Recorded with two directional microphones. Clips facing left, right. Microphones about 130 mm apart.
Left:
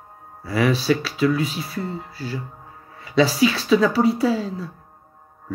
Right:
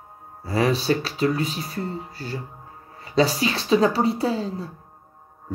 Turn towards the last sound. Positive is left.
turn(degrees=-30)  # may be behind; listen again after turning